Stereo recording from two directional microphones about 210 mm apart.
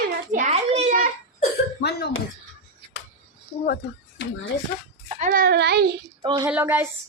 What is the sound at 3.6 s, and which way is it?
Speech, 50° left (ahead or behind).